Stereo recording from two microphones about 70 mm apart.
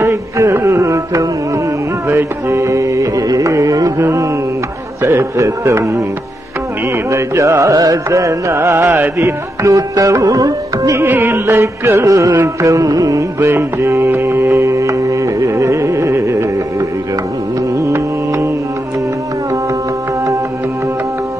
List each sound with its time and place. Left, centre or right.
0.0 s music: right
3.3 s carnatic music: right
7.1 s carnatic music: right
11.0 s music: right
12.6 s music: right
13.5 s music: right
17.8 s music: right